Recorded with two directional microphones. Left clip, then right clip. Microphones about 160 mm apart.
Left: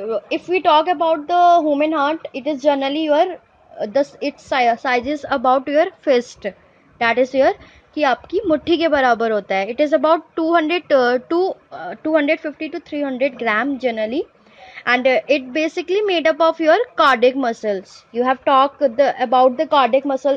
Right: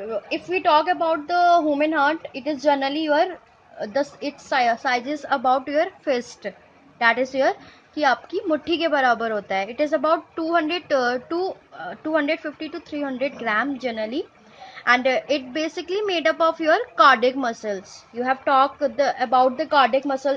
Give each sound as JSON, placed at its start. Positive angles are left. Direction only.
{"t": 0.1, "sound": "a woman's voice", "side_deg": 45}